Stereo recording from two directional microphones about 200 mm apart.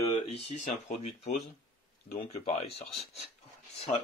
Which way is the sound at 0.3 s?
35° left (ahead or behind).